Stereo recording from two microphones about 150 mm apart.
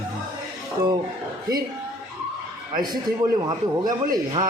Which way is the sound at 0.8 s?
20° right (ahead or behind).